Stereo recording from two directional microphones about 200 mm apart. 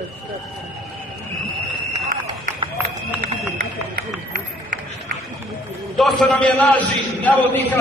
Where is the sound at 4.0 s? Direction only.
45° right (ahead or behind).